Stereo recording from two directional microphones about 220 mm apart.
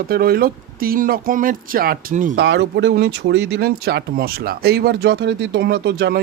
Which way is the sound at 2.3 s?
50° right (ahead or behind).